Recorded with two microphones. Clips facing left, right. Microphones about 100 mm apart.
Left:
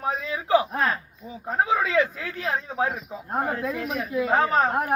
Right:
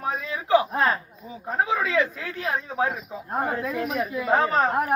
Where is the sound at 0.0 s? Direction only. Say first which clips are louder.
Left 1 dB; 25° left (ahead or behind).